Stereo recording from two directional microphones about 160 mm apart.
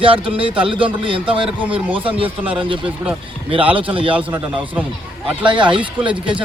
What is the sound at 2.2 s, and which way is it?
Speech, 10° right (ahead or behind).